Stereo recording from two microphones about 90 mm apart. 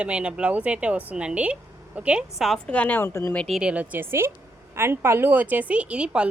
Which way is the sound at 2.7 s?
15° left (ahead or behind).